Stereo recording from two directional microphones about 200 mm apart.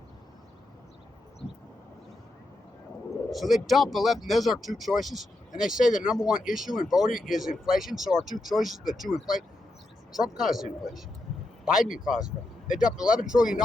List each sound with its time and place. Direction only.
3.2 s speech: centre (ahead or behind)